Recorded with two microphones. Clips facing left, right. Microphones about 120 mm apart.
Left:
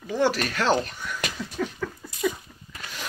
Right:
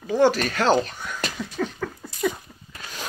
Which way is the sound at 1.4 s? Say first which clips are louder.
Right 2 dB; 35° right (ahead or behind).